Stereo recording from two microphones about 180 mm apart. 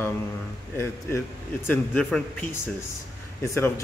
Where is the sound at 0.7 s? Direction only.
15° left (ahead or behind).